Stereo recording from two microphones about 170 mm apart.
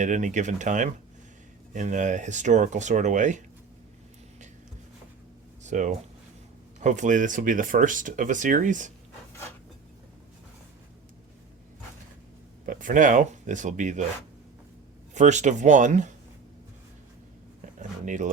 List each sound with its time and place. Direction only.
0.0 s speech: 45° right (ahead or behind)
5.6 s speech: 45° right (ahead or behind)
12.6 s speech: 50° right (ahead or behind)
15.1 s speech: 45° right (ahead or behind)
17.7 s speech: 45° right (ahead or behind)